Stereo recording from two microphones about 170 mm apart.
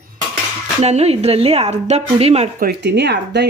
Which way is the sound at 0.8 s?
40° right (ahead or behind).